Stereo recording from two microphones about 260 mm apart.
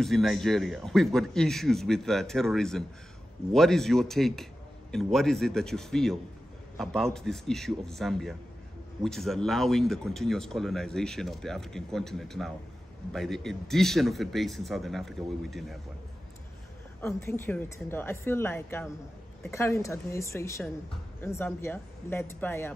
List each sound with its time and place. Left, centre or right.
0.0 s speech: centre
17.0 s speech: centre